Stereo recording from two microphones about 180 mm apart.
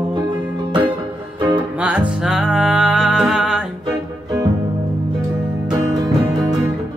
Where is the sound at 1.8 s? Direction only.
5° right (ahead or behind).